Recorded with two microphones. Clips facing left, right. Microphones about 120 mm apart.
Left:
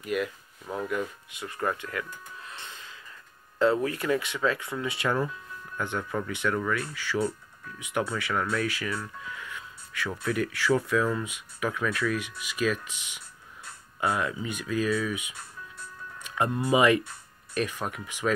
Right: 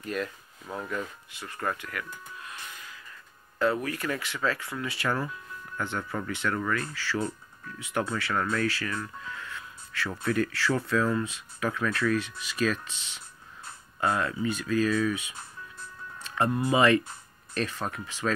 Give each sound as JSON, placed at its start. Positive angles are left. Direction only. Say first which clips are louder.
{"t": 0.0, "sound": "speech", "louder": "left 3 dB", "side_deg": 10}
{"t": 2.5, "sound": "music", "louder": "even", "side_deg": 25}
{"t": 3.5, "sound": "speech", "louder": "left 3 dB", "side_deg": 25}
{"t": 8.2, "sound": "speech", "louder": "even", "side_deg": 10}
{"t": 16.2, "sound": "music", "louder": "even", "side_deg": 15}
{"t": 16.7, "sound": "speech", "louder": "left 1 dB", "side_deg": 15}